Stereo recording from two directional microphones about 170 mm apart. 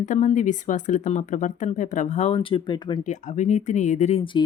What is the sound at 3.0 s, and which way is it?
Speech, 45° left (ahead or behind).